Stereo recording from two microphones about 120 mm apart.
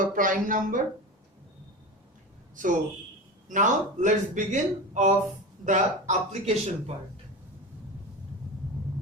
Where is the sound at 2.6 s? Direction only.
90° right.